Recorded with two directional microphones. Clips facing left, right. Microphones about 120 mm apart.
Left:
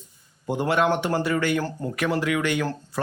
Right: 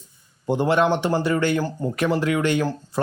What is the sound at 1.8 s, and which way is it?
Speech, 15° right (ahead or behind).